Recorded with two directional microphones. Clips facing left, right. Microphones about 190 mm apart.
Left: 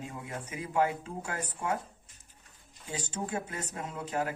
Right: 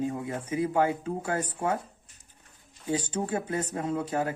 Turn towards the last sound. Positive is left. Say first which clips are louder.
# right 5 dB
turn(degrees=-30)  # may be behind; listen again after turning